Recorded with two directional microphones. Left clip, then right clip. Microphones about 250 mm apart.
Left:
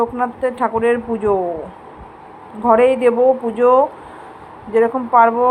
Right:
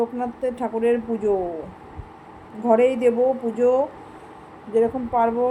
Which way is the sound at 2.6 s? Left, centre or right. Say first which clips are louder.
Left 5 dB; centre.